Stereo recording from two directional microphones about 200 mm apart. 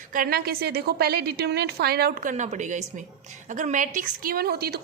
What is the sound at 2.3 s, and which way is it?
A woman's voice, 35° right (ahead or behind).